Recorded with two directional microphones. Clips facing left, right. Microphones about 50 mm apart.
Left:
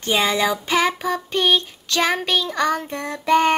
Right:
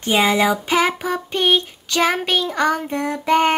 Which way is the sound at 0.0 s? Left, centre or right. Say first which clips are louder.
Right 3 dB; centre.